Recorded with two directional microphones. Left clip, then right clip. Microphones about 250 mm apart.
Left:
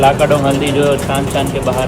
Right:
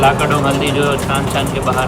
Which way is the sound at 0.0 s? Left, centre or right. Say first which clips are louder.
Left 2 dB; centre.